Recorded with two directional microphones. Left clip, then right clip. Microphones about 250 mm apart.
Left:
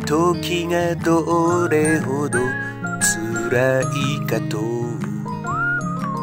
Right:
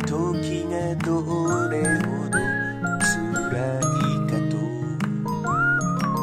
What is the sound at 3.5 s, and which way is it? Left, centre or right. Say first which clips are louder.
Music: left 9 dB; left.